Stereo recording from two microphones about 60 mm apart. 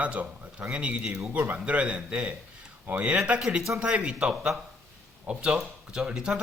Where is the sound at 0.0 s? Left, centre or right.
Right.